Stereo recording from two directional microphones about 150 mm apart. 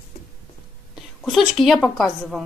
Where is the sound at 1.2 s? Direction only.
Centre (ahead or behind).